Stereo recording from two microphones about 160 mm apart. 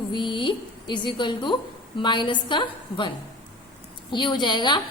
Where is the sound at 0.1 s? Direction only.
30° left (ahead or behind).